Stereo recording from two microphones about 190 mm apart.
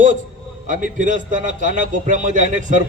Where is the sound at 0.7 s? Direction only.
45° right (ahead or behind).